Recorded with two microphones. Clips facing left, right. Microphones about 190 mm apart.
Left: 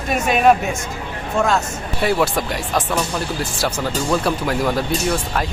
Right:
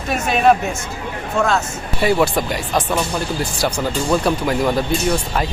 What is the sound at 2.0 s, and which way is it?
Speech, centre (ahead or behind).